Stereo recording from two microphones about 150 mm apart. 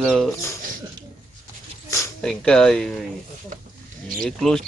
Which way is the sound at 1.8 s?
20° left (ahead or behind).